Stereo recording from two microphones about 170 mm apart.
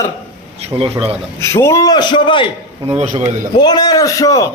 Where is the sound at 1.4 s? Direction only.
15° left (ahead or behind).